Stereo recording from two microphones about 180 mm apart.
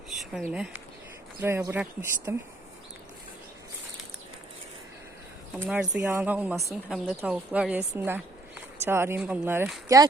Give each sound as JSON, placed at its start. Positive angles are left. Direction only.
{"t": 0.1, "sound": "speech", "side_deg": 0}
{"t": 5.6, "sound": "speech", "side_deg": -5}